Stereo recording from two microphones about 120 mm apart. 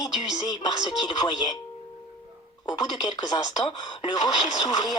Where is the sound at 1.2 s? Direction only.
35° left (ahead or behind).